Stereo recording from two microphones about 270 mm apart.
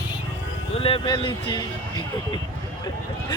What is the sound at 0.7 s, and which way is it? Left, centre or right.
Speech, left.